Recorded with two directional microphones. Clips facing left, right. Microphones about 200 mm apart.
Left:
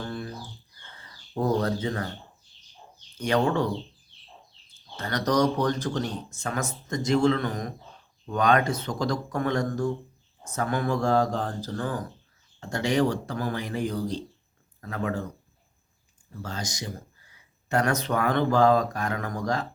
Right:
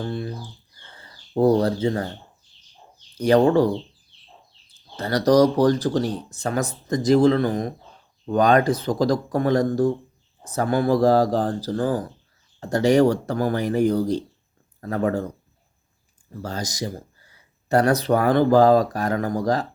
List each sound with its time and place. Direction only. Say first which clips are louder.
0.0 s a sound: right 6 dB; 25° right (ahead or behind)
0.9 s speech: right 8 dB; 30° right (ahead or behind)
3.2 s speech: right 8 dB; 35° right (ahead or behind)
4.9 s speech: right 8 dB; 35° right (ahead or behind)
16.4 s speech: right 6 dB; 40° right (ahead or behind)